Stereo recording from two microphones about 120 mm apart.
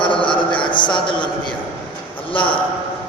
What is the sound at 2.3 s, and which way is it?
Speech, 45° left (ahead or behind).